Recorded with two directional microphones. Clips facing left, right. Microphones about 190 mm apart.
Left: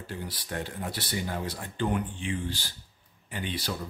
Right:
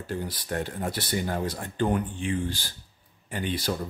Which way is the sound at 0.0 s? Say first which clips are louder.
Right 5 dB; 45° right (ahead or behind).